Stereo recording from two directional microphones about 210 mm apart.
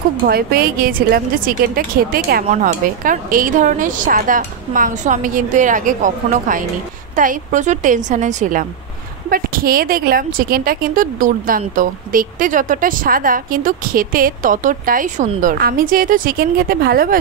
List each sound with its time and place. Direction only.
0.3 s a woman's voice: 45° right (ahead or behind)